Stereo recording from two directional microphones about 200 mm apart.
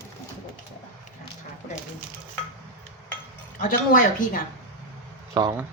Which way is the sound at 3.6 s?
45° left (ahead or behind).